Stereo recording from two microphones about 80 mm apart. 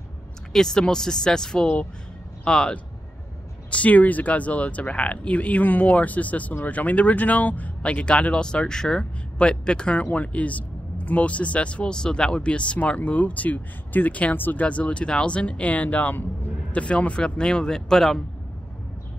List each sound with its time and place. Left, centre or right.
0.5 s speech: centre